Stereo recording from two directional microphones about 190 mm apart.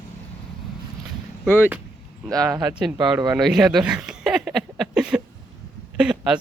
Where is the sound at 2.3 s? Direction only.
20° right (ahead or behind).